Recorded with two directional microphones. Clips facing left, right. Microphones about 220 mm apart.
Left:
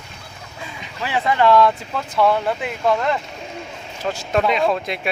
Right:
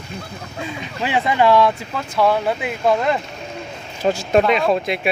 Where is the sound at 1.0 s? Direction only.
15° right (ahead or behind).